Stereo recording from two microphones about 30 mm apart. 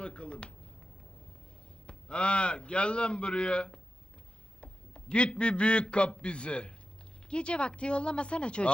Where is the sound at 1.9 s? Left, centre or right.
Left.